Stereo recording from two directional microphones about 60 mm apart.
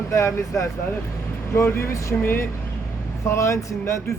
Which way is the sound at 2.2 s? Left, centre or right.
Left.